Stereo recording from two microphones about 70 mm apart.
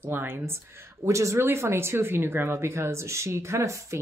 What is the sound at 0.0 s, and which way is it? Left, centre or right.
Speech, right.